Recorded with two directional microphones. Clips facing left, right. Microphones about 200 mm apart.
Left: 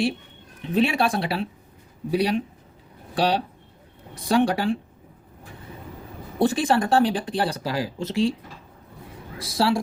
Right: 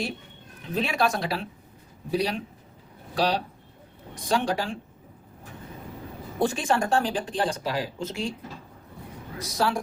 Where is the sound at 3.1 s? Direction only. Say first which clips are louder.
Left 3 dB; 30° left (ahead or behind).